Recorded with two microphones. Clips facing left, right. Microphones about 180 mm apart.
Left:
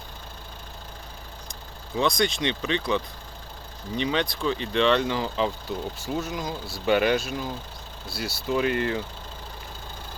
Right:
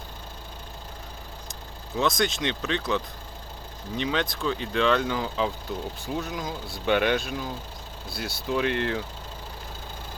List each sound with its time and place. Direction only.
2.0 s speech: centre (ahead or behind)